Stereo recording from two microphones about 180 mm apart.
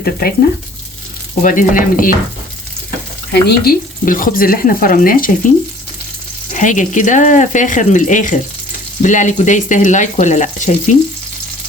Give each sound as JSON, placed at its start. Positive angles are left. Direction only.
{"t": 0.0, "sound": "speech", "side_deg": 55}
{"t": 1.4, "sound": "speech", "side_deg": 50}
{"t": 3.4, "sound": "speech", "side_deg": 55}
{"t": 6.5, "sound": "speech", "side_deg": 45}